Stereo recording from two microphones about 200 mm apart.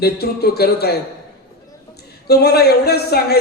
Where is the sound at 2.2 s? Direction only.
55° left (ahead or behind).